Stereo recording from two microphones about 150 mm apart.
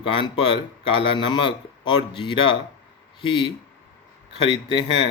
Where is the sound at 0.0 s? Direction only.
35° left (ahead or behind).